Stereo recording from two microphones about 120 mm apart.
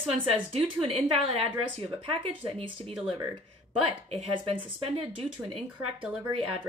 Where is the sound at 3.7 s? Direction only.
50° right (ahead or behind).